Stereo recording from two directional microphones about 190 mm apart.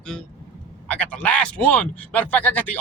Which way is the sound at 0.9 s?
5° left (ahead or behind).